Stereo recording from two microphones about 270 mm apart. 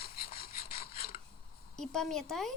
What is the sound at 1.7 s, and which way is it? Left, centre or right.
Speech, centre.